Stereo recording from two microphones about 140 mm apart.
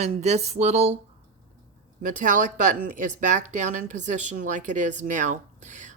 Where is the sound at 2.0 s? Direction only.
70° right (ahead or behind).